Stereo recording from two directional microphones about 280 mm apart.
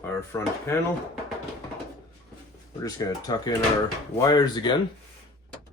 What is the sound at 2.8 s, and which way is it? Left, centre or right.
Speech, centre.